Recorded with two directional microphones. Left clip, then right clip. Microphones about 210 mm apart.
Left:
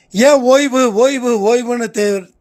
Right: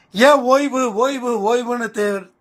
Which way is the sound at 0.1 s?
60° left (ahead or behind).